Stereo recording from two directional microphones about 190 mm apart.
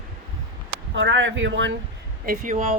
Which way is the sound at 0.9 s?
75° right (ahead or behind).